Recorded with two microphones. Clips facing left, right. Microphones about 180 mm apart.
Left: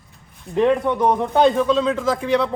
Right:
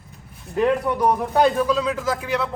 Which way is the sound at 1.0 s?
25° left (ahead or behind).